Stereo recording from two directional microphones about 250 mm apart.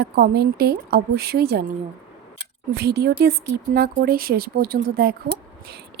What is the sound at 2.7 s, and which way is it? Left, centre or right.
Speech, right.